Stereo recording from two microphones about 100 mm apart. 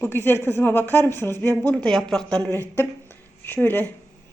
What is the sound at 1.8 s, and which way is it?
Speech, 5° left (ahead or behind).